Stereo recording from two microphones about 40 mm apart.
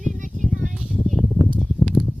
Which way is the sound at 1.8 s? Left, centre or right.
Centre.